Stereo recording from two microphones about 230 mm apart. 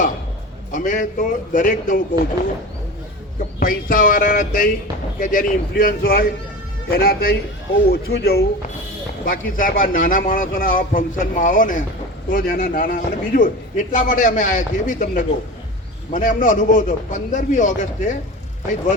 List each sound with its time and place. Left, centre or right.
0.7 s speech: left
3.6 s speech: left